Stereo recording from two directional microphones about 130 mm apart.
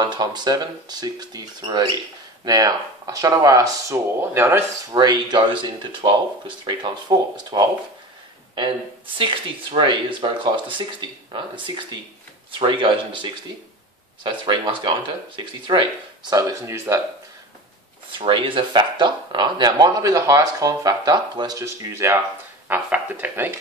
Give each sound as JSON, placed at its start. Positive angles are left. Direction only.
{"t": 0.0, "sound": "speech", "side_deg": -35}
{"t": 4.9, "sound": "speech", "side_deg": -35}
{"t": 9.2, "sound": "speech", "side_deg": -40}
{"t": 18.1, "sound": "speech", "side_deg": -40}